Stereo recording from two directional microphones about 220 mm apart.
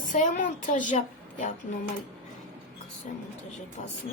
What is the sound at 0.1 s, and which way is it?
Speech, 35° left (ahead or behind).